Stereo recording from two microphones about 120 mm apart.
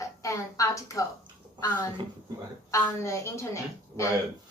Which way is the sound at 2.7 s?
25° left (ahead or behind).